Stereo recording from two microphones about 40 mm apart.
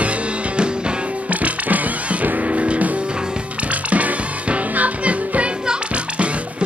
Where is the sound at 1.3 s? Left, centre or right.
Right.